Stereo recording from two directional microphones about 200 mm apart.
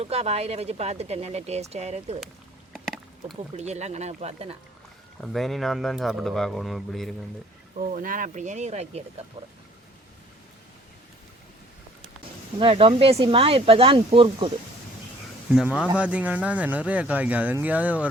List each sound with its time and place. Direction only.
0.0 s speech: 30° right (ahead or behind)
2.7 s a sound: centre (ahead or behind)
3.5 s speech: 35° right (ahead or behind)
5.2 s speech: centre (ahead or behind)
7.8 s speech: 40° right (ahead or behind)
12.5 s speech: 30° right (ahead or behind)
15.4 s speech: 5° right (ahead or behind)